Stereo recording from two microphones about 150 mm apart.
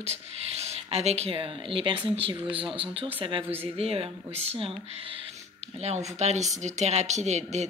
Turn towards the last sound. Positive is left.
turn(degrees=-50)  # may be behind; listen again after turning